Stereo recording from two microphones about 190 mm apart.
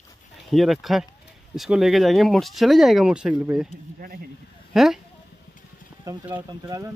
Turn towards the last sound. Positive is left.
turn(degrees=-15)  # may be behind; listen again after turning